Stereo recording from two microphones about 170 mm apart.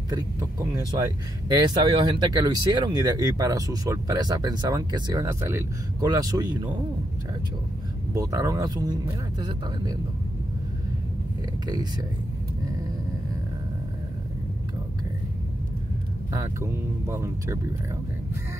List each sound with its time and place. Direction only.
0.1 s speech: 20° right (ahead or behind)
8.1 s speech: 20° right (ahead or behind)
11.6 s speech: 25° right (ahead or behind)
16.3 s speech: 15° right (ahead or behind)